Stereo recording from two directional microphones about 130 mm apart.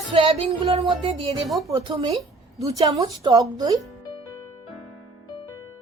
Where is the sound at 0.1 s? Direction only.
45° right (ahead or behind).